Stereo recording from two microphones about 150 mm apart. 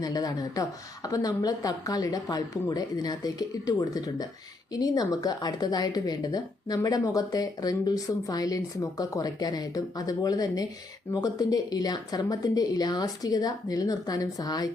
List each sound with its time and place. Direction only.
0.0 s speech: 25° left (ahead or behind)